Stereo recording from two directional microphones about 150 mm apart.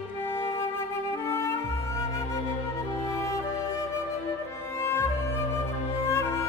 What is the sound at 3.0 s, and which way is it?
Music, 20° left (ahead or behind).